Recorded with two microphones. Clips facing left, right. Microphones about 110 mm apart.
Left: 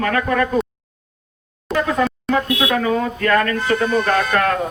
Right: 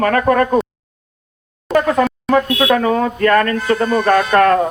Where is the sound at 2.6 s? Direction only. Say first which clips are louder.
Right 4 dB; 45° right (ahead or behind).